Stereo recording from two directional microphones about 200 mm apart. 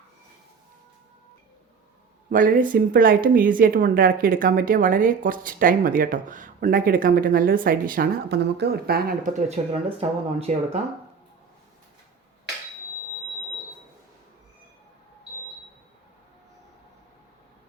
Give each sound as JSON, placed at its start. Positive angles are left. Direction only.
{"t": 2.3, "sound": "speech", "side_deg": -45}
{"t": 9.6, "sound": "speech", "side_deg": -30}